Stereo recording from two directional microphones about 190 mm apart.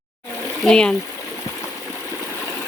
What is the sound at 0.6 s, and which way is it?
Speech, 5° left (ahead or behind).